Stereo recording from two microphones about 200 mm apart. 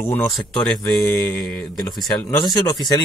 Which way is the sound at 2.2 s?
15° left (ahead or behind).